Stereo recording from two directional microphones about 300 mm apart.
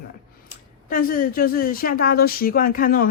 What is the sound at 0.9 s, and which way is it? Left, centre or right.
Speech, left.